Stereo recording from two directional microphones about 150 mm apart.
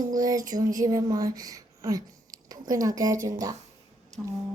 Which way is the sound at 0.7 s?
25° right (ahead or behind).